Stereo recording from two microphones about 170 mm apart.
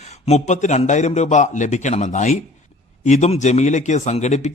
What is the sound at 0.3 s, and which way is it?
A man's voice, 40° left (ahead or behind).